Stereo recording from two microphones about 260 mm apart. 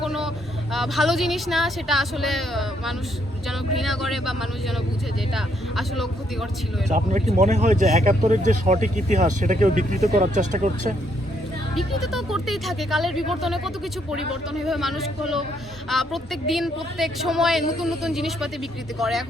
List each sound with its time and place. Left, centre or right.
0.0 s vehicle: centre
0.7 s a woman's voice: centre
6.8 s speech: right
11.7 s a woman's voice: centre